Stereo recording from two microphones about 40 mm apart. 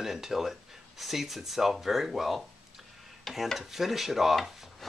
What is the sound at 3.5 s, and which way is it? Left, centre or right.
Stir, centre.